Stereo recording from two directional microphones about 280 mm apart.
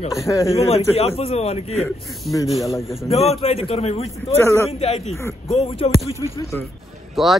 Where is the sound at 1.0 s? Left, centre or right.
Left.